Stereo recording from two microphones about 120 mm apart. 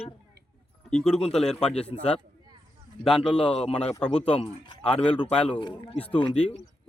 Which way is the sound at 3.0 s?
5° left (ahead or behind).